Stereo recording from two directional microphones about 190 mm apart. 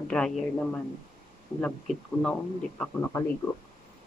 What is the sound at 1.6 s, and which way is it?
Speech, 5° left (ahead or behind).